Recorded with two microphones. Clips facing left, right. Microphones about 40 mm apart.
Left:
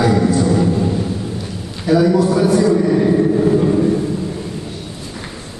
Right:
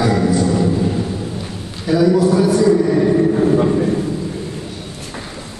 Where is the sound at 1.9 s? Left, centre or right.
Centre.